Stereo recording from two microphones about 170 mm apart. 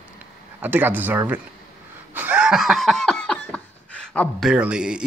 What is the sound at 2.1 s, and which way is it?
Laughter, 10° right (ahead or behind).